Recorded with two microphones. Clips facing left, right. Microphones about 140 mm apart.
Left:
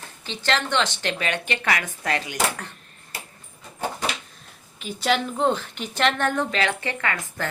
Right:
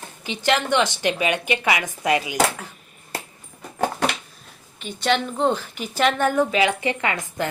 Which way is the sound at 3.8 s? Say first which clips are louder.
Right 5 dB; 70° right (ahead or behind).